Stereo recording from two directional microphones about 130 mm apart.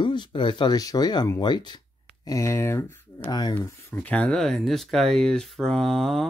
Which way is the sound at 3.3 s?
30° left (ahead or behind).